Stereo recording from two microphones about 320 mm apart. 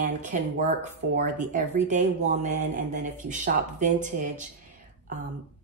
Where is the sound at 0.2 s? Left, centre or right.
Right.